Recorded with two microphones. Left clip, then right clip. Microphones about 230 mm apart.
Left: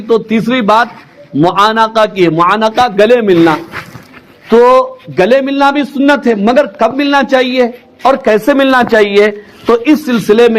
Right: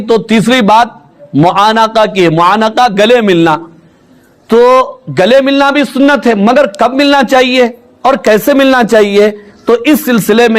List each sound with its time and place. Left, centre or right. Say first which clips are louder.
0.1 s a man's voice: right 3 dB; right